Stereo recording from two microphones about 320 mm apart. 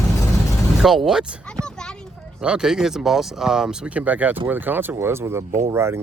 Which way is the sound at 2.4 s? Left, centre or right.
Centre.